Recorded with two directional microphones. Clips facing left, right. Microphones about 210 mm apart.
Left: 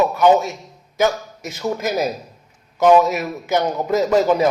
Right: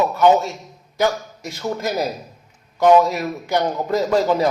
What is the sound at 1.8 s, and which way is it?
Speech, 20° left (ahead or behind).